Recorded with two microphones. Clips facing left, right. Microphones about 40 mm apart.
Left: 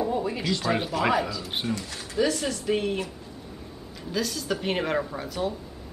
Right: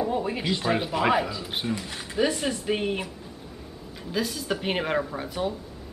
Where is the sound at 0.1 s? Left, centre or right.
Right.